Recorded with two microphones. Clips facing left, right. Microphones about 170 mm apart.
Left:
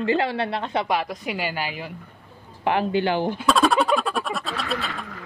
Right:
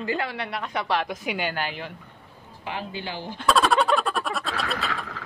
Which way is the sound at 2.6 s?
60° left (ahead or behind).